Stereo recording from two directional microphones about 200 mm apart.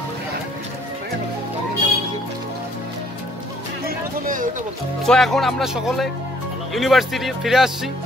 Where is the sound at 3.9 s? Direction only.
45° right (ahead or behind).